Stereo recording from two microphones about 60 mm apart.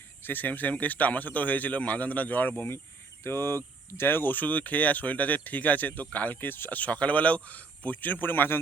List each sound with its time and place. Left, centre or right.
0.3 s speech: left